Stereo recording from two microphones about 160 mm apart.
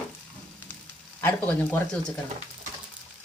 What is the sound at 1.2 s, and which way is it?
Speech, 10° left (ahead or behind).